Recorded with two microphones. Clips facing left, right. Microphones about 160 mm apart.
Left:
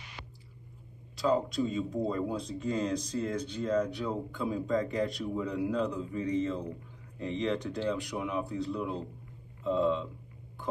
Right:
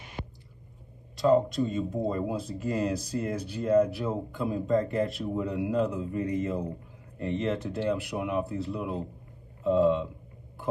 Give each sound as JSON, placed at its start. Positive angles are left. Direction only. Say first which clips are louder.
{"t": 0.2, "sound": "hum", "louder": "right 11 dB", "side_deg": -45}
{"t": 1.1, "sound": "speech", "louder": "right 5 dB", "side_deg": 0}